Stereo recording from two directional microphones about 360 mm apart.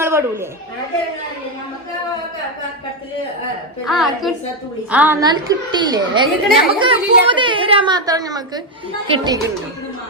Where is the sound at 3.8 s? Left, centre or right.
Centre.